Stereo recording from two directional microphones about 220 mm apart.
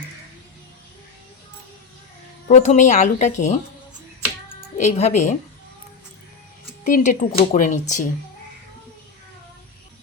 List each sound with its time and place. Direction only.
2.5 s speech: 35° left (ahead or behind)
4.8 s speech: 30° left (ahead or behind)
6.8 s speech: 35° left (ahead or behind)